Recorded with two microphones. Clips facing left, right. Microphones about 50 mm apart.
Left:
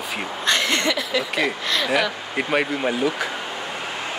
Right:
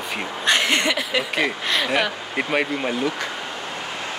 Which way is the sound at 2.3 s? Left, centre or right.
Centre.